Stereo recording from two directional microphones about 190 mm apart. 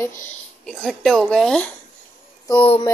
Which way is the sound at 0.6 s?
Centre (ahead or behind).